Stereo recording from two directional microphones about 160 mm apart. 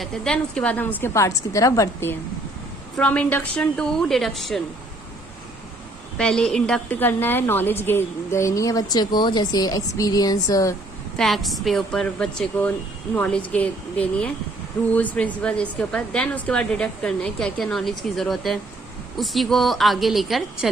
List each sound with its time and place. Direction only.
0.0 s a woman's voice: 5° left (ahead or behind)
6.1 s a woman's voice: 5° left (ahead or behind); by 10.8 s 20° left (ahead or behind)
11.2 s a woman's voice: centre (ahead or behind)